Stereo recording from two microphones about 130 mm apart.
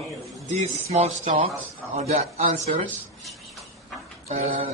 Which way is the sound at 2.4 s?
65° right (ahead or behind).